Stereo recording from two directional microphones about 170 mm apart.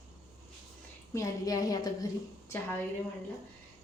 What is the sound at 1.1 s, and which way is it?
Speech, 20° left (ahead or behind).